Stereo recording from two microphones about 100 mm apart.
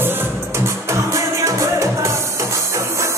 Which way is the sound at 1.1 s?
30° right (ahead or behind).